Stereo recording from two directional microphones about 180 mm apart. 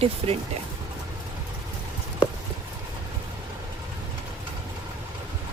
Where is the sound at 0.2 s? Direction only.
35° right (ahead or behind).